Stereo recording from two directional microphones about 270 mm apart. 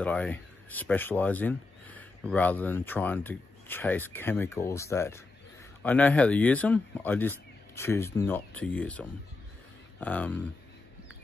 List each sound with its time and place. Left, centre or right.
0.0 s speech: centre